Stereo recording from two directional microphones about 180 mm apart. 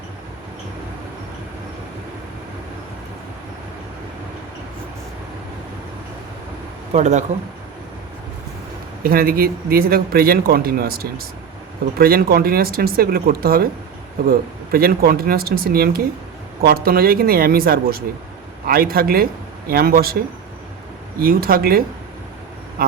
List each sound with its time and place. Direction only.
6.9 s speech: 40° right (ahead or behind)
9.0 s a man's voice: 55° right (ahead or behind)
21.2 s a man's voice: 55° right (ahead or behind)